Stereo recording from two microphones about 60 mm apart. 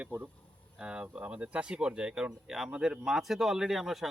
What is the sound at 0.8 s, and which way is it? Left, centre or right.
A man's voice, centre.